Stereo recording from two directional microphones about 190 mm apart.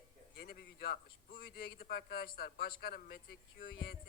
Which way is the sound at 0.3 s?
55° left (ahead or behind).